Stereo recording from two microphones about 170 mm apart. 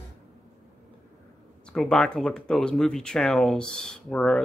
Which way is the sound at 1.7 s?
5° left (ahead or behind).